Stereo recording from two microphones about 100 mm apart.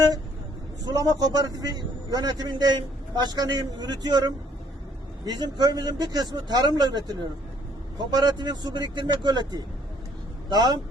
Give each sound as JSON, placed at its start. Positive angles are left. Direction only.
{"t": 0.9, "sound": "a man's voice", "side_deg": -40}